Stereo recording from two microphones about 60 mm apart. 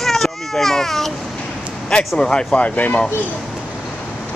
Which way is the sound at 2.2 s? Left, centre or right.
Centre.